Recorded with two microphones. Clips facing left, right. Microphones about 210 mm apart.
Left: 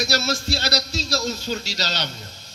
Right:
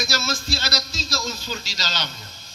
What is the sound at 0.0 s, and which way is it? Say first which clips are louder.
A man's voice: left 4 dB; 65° left (ahead or behind).